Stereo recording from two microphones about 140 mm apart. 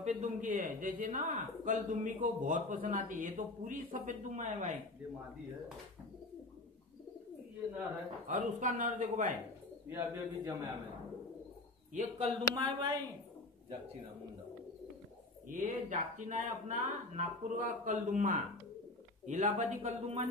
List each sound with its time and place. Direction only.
0.0 s a man's voice: 60° right (ahead or behind)
8.3 s a man's voice: 65° right (ahead or behind)
9.8 s a man's voice: 20° right (ahead or behind)
11.9 s speech: 60° right (ahead or behind)
12.5 s a woman's voice: 35° right (ahead or behind)
15.5 s speech: 65° right (ahead or behind)